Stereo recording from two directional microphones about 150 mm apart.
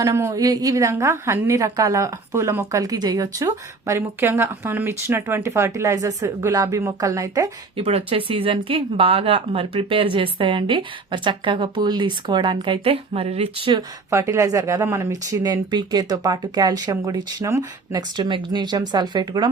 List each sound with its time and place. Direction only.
0.0 s a woman's voice: 20° right (ahead or behind)
7.8 s speech: 40° right (ahead or behind)
14.1 s a woman's voice: 20° right (ahead or behind)